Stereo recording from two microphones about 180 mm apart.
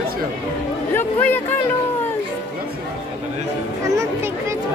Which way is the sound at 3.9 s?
15° right (ahead or behind).